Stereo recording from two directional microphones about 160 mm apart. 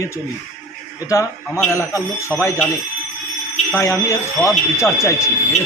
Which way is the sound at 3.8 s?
20° left (ahead or behind).